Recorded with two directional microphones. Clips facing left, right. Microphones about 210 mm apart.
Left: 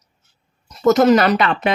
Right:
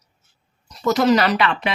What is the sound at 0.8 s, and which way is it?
Speech, 50° left (ahead or behind).